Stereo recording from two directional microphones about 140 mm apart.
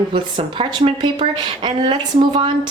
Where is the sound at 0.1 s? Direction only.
35° right (ahead or behind).